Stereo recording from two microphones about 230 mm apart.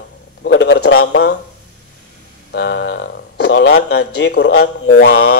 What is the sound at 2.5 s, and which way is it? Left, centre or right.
A man's voice, left.